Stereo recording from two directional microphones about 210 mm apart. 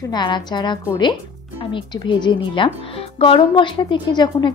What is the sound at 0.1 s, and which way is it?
A woman's voice, 20° left (ahead or behind).